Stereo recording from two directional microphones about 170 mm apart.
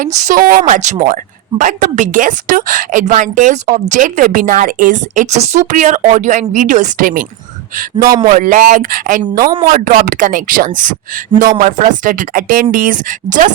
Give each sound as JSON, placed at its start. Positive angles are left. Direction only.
{"t": 0.0, "sound": "a woman's voice", "side_deg": -45}
{"t": 8.3, "sound": "a woman's voice", "side_deg": -50}